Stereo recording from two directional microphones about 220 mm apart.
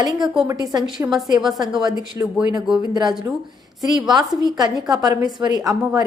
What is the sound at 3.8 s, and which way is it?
A woman's voice, 20° right (ahead or behind).